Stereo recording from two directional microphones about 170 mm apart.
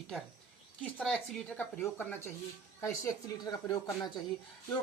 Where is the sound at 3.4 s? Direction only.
20° left (ahead or behind).